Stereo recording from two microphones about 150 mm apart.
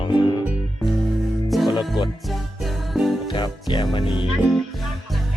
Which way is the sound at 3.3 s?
30° left (ahead or behind).